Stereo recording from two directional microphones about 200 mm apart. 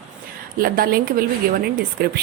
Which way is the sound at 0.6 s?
50° right (ahead or behind).